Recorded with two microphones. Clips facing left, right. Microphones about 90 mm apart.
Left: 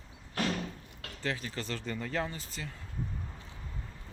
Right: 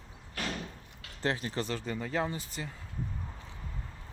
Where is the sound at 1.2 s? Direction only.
30° right (ahead or behind).